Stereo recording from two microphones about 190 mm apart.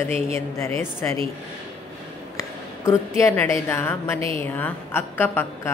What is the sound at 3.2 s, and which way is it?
A woman's voice, 15° left (ahead or behind).